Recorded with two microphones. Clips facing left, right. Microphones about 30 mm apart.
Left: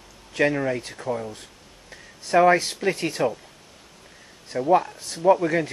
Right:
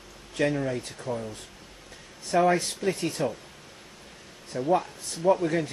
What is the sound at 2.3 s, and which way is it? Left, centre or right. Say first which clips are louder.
Speech: left 5 dB; left.